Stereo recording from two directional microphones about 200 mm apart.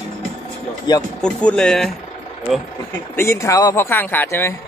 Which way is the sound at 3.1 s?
15° left (ahead or behind).